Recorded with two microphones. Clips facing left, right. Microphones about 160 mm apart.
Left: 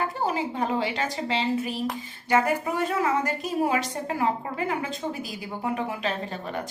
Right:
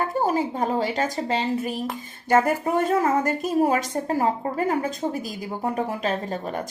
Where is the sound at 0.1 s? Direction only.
45° right (ahead or behind).